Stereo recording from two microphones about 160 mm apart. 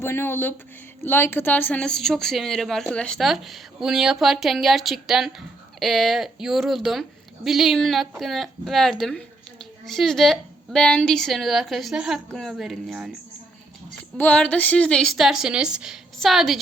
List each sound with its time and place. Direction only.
0.0 s speech: 15° left (ahead or behind); by 13.1 s centre (ahead or behind)
14.2 s speech: 10° left (ahead or behind)